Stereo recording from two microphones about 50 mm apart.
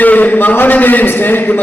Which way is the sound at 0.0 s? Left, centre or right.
Left.